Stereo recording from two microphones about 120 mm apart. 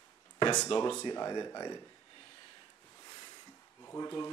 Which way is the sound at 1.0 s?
35° left (ahead or behind).